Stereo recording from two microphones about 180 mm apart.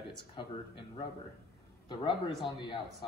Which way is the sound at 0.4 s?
25° left (ahead or behind).